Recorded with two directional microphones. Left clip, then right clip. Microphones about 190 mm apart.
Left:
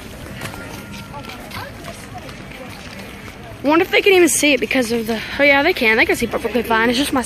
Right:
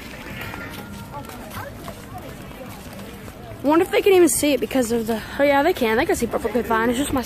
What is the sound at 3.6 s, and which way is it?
Speech, centre (ahead or behind).